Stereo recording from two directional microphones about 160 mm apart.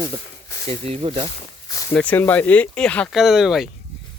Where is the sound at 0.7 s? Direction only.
40° right (ahead or behind).